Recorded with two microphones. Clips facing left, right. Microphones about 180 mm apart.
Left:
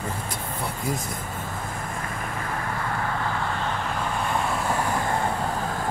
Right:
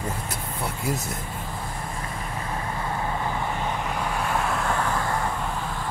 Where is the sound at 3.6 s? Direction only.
10° right (ahead or behind).